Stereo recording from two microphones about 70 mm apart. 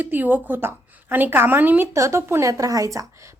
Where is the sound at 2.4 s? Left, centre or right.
Right.